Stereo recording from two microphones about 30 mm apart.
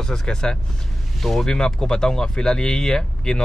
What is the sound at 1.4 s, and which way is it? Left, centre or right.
Speech, left.